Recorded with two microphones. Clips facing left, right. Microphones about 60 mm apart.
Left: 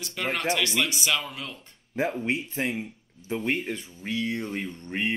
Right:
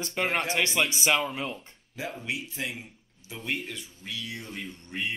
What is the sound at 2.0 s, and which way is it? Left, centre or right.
Speech, left.